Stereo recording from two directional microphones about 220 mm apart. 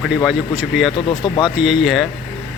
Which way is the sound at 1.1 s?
20° left (ahead or behind).